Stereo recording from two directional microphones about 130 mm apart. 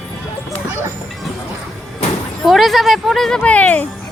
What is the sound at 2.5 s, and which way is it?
Speech, centre (ahead or behind).